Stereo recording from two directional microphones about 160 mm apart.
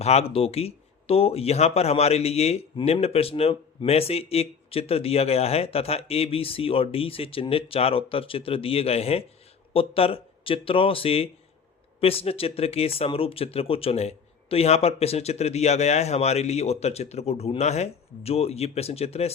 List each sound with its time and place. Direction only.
0.0 s speech: 40° left (ahead or behind)